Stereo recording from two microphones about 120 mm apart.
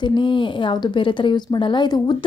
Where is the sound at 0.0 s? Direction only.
40° left (ahead or behind).